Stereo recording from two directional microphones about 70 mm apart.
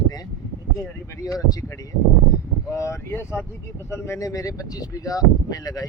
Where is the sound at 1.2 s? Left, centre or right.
Left.